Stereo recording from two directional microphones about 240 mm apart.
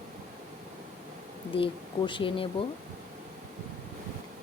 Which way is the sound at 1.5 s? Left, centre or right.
Left.